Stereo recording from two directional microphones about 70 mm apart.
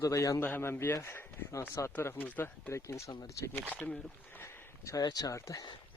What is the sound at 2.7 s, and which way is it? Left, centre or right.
Speech, left.